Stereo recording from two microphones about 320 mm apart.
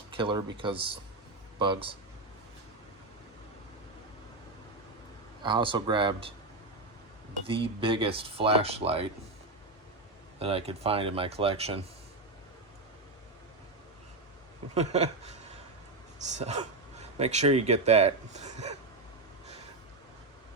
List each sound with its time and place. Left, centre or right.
0.2 s speech: centre
5.4 s speech: centre
7.4 s speech: centre
10.4 s speech: centre
14.8 s speech: centre